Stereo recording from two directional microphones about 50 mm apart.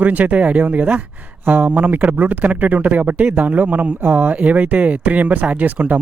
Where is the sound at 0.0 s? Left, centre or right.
Right.